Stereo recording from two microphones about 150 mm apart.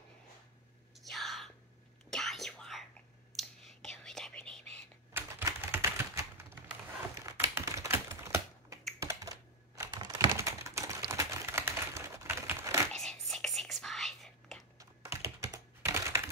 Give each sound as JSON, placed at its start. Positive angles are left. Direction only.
{"t": 1.1, "sound": "whispering", "side_deg": 0}
{"t": 5.1, "sound": "typewriter", "side_deg": -15}
{"t": 9.0, "sound": "typing", "side_deg": -20}
{"t": 12.9, "sound": "whispering", "side_deg": 5}
{"t": 14.8, "sound": "computer keyboard", "side_deg": -20}